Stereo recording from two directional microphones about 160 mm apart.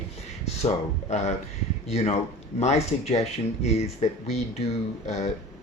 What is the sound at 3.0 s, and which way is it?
Speech, 45° left (ahead or behind).